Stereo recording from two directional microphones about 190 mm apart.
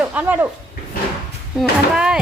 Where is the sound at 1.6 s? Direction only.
5° right (ahead or behind).